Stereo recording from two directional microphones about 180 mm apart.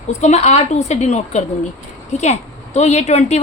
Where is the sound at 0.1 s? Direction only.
40° left (ahead or behind).